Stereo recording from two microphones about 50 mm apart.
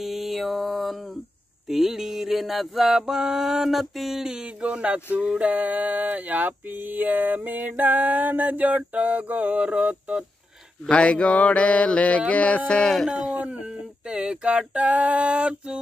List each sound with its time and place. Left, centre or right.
0.0 s mantra: centre
4.2 s female singing: centre
5.4 s a sound: right
10.9 s mantra: left
13.3 s female singing: right